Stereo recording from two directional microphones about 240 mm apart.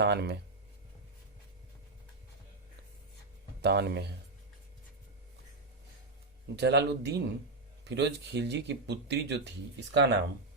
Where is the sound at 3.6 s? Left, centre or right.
Right.